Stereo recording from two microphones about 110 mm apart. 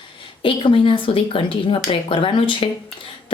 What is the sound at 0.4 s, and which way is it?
A woman's voice, 50° left (ahead or behind).